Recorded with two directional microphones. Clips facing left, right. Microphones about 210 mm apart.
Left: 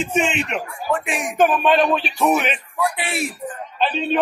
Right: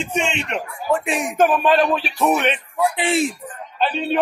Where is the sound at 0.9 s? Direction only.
35° right (ahead or behind).